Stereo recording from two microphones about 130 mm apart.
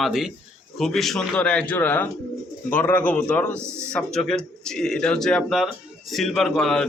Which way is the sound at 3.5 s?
20° right (ahead or behind).